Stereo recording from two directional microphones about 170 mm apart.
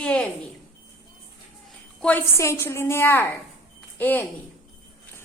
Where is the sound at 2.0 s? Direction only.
15° left (ahead or behind).